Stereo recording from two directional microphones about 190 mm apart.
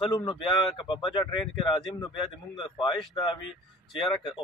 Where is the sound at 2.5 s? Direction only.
25° left (ahead or behind).